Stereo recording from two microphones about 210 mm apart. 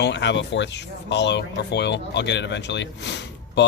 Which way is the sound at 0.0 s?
60° left (ahead or behind).